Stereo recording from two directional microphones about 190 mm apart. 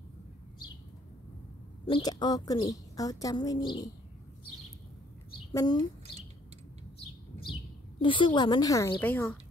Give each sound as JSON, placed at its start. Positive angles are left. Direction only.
{"t": 1.9, "sound": "a woman's voice", "side_deg": 20}
{"t": 5.5, "sound": "a woman's voice", "side_deg": 20}
{"t": 8.0, "sound": "a woman's voice", "side_deg": 25}